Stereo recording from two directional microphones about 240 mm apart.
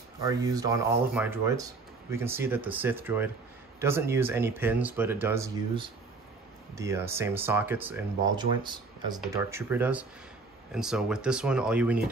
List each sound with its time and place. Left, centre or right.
0.2 s speech: centre
8.4 s speech: centre